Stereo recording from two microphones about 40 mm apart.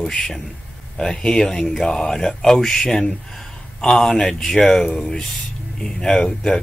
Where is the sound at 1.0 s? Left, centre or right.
Centre.